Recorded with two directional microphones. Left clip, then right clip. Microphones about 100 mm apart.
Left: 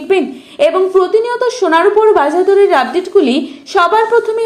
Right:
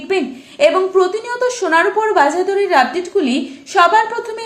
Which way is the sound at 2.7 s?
30° left (ahead or behind).